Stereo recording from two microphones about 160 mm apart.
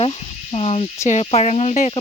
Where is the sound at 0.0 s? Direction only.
40° left (ahead or behind).